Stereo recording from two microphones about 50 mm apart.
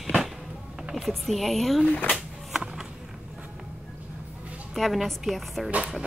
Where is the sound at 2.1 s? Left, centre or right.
Centre.